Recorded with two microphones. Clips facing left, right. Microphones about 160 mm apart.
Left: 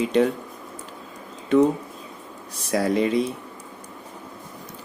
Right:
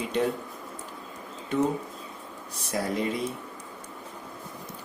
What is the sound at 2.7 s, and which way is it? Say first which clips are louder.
Speech: left 7 dB; 90° left.